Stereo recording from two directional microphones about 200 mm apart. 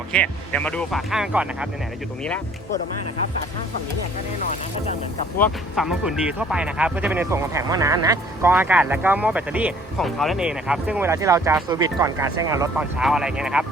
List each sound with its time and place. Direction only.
0.1 s speech: 5° left (ahead or behind)
5.7 s speech: centre (ahead or behind)
12.7 s speech: 5° right (ahead or behind)